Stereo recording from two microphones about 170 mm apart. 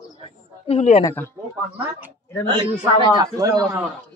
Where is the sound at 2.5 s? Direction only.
30° right (ahead or behind).